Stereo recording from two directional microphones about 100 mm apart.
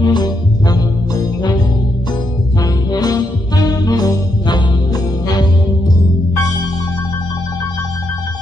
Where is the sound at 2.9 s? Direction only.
40° left (ahead or behind).